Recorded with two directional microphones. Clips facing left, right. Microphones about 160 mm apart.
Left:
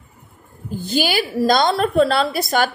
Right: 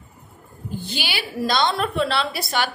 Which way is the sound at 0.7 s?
45° left (ahead or behind).